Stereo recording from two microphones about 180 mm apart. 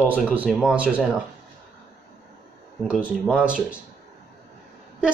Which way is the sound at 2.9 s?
5° right (ahead or behind).